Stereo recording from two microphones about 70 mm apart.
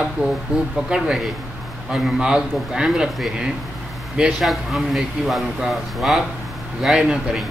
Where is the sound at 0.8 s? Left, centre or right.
Centre.